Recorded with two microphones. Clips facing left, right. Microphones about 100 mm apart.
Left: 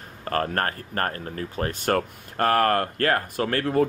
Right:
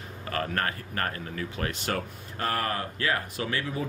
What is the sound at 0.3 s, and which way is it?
Speech, 45° left (ahead or behind).